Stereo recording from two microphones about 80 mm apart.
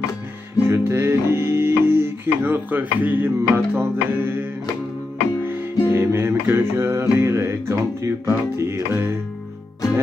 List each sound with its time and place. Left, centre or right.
0.7 s music: right
5.9 s music: right